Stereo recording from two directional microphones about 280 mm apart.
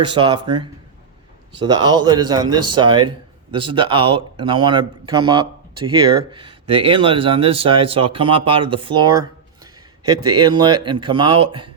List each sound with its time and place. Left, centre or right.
0.0 s speech: centre
10.2 s speech: centre